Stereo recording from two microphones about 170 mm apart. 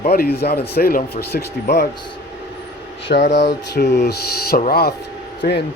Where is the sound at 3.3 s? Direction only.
80° left.